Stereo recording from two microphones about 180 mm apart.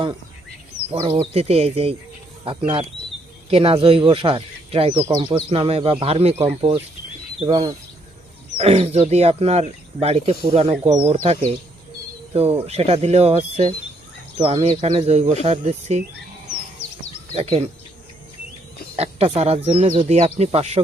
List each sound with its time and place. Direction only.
1.0 s speech: 30° right (ahead or behind)
6.3 s speech: 10° right (ahead or behind)
7.3 s speech: 25° right (ahead or behind)
8.5 s speech: 35° right (ahead or behind)
17.3 s speech: 35° right (ahead or behind)
18.9 s speech: 35° right (ahead or behind)